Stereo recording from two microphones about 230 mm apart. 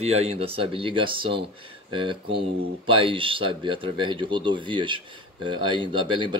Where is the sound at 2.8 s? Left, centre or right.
Right.